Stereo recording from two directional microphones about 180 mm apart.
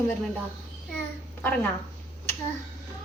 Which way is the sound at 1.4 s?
10° left (ahead or behind).